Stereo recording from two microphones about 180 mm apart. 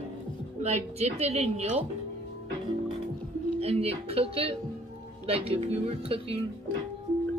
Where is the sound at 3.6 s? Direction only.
35° right (ahead or behind).